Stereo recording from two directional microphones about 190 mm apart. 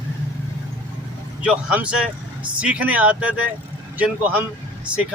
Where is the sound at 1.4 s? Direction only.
5° right (ahead or behind).